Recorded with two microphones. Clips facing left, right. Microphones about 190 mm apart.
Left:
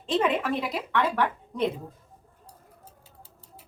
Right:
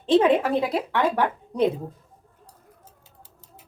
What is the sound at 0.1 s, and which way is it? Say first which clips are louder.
Speech: right 7 dB; 35° right (ahead or behind).